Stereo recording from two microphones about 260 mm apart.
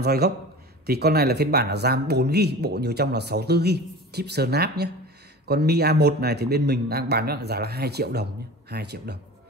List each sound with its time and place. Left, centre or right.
0.0 s a man's voice: right